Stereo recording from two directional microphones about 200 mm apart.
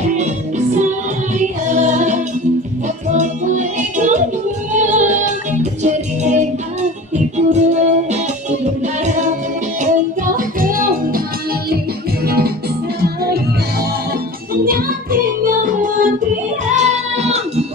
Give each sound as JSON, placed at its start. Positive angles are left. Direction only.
{"t": 1.4, "sound": "music", "side_deg": -35}
{"t": 10.3, "sound": "music", "side_deg": -45}
{"t": 12.3, "sound": "music", "side_deg": -50}
{"t": 15.4, "sound": "music", "side_deg": -40}